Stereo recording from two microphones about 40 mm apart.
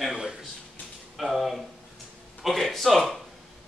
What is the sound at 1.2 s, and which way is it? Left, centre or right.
Speech, centre.